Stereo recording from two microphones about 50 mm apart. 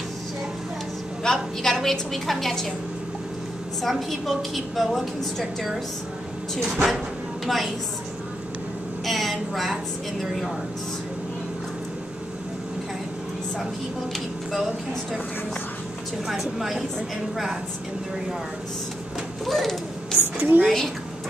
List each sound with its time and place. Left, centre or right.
1.2 s a woman's voice: centre
3.9 s a woman's voice: centre
6.6 s a woman's voice: centre
9.0 s vehicle: centre
14.1 s speech: centre
16.3 s a woman's voice: centre
19.4 s a sound: centre
20.3 s a woman's voice: right
20.6 s a woman's voice: centre